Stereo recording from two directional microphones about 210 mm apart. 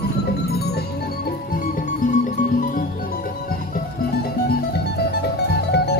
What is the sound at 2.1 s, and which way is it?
Music, 35° left (ahead or behind).